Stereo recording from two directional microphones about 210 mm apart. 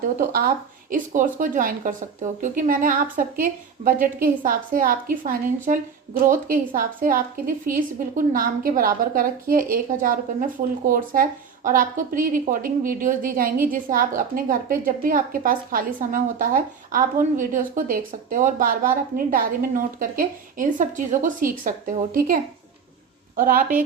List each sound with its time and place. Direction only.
0.2 s speech: 40° right (ahead or behind)